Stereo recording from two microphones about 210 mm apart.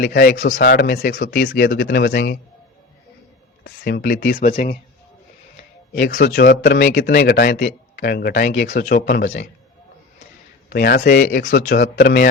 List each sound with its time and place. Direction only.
0.0 s speech: 50° left (ahead or behind)
0.6 s speech: 50° left (ahead or behind)
3.6 s speech: 55° left (ahead or behind)
5.9 s speech: 45° left (ahead or behind)
9.2 s a man's voice: 30° left (ahead or behind)
10.7 s speech: 50° left (ahead or behind)